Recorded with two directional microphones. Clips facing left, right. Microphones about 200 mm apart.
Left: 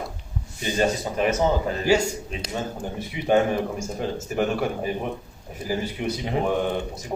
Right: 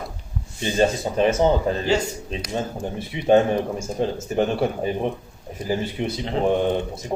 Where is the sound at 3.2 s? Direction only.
25° right (ahead or behind).